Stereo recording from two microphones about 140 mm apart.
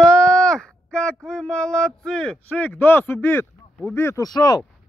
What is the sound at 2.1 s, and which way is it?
Speech, 5° left (ahead or behind).